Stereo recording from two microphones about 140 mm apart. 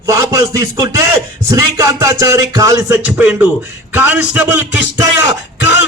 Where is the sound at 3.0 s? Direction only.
10° right (ahead or behind).